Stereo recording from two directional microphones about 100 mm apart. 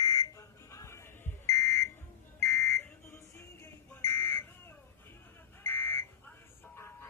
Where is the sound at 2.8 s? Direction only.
30° left (ahead or behind).